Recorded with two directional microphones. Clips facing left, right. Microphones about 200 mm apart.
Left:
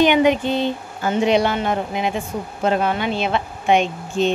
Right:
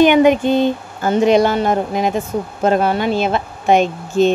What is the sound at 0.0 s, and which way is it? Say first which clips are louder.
Speech: right 4 dB; 50° right (ahead or behind).